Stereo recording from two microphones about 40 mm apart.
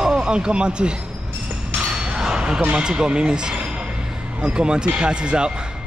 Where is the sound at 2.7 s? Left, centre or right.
Right.